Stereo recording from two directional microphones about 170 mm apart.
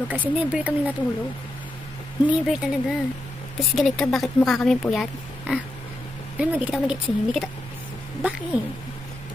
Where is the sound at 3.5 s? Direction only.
Centre (ahead or behind).